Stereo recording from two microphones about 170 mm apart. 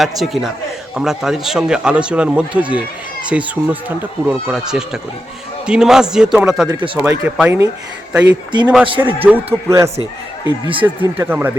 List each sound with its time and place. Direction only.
0.0 s speech: centre (ahead or behind)
6.7 s speech: 25° right (ahead or behind)
6.9 s speech: 10° right (ahead or behind)
10.4 s speech: 30° right (ahead or behind)
10.8 s speech: 10° right (ahead or behind)